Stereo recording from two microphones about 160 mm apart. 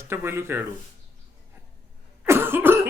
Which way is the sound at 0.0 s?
15° right (ahead or behind).